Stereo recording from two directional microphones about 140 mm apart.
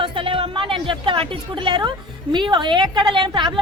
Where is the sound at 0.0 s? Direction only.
40° right (ahead or behind).